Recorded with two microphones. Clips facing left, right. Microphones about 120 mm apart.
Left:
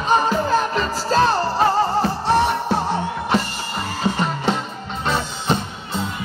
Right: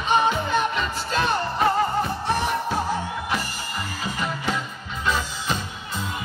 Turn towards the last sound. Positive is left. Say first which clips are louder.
# left 5 dB
turn(degrees=65)  # may be behind; listen again after turning